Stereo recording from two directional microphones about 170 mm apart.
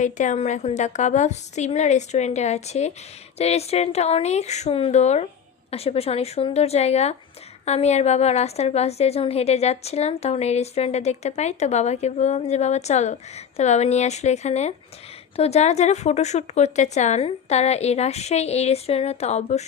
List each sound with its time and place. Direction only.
0.0 s a woman's voice: 45° left (ahead or behind)